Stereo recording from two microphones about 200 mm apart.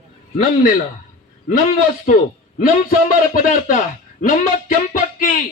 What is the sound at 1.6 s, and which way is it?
A man's voice, 40° left (ahead or behind).